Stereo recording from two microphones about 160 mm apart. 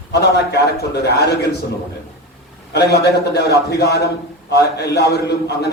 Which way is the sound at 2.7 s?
90° left.